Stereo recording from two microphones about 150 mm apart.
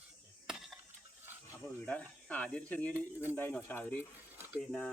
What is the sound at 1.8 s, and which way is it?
Speech, 10° left (ahead or behind).